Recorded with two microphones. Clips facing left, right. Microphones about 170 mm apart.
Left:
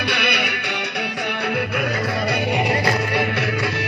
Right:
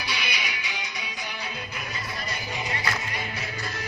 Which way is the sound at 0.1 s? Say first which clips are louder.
Left 10 dB; 65° left (ahead or behind).